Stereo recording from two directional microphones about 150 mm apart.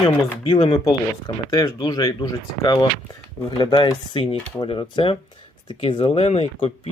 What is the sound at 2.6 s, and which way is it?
Speech, 35° left (ahead or behind).